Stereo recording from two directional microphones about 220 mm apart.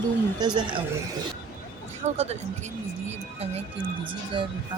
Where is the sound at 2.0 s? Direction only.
30° right (ahead or behind).